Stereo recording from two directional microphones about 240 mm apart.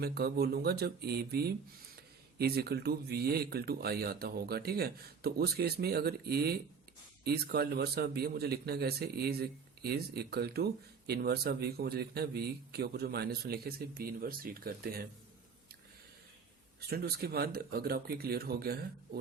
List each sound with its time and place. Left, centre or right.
0.0 s speech: right
16.9 s speech: right